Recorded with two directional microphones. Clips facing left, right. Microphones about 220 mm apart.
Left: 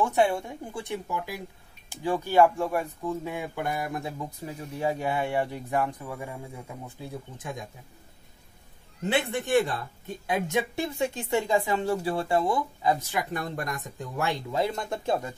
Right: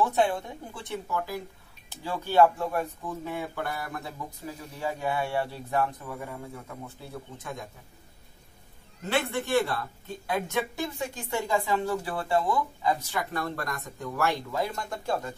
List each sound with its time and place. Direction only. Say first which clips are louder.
0.0 s speech: left 1 dB; 10° left (ahead or behind)
9.1 s speech: left 2 dB; 20° left (ahead or behind)